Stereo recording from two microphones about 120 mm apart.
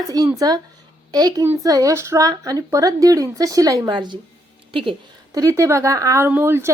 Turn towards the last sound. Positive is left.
turn(degrees=-20)  # may be behind; listen again after turning